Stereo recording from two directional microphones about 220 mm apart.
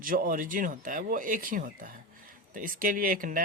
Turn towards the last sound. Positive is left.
turn(degrees=-40)  # may be behind; listen again after turning